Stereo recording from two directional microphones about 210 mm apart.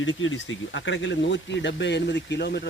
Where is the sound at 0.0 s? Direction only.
65° left (ahead or behind).